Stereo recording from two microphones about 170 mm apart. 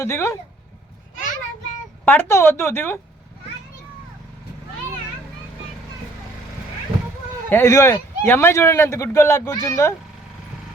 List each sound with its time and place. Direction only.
0.0 s a man's voice: 15° left (ahead or behind)
2.0 s a man's voice: 10° left (ahead or behind)
7.5 s a man's voice: 20° left (ahead or behind)